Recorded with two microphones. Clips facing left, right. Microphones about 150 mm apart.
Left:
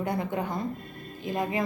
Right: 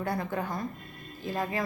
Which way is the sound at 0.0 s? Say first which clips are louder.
Left 2 dB; 20° left (ahead or behind).